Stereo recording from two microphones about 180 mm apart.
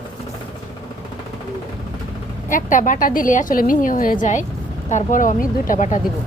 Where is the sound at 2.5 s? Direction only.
45° left (ahead or behind).